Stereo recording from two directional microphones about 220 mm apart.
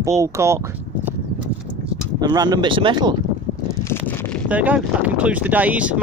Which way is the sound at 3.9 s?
10° left (ahead or behind).